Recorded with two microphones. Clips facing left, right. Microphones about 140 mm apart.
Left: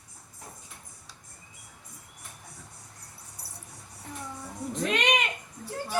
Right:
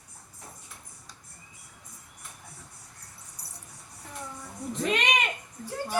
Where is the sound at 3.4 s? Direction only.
25° left (ahead or behind).